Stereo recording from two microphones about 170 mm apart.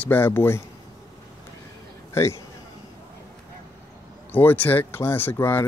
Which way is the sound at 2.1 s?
15° left (ahead or behind).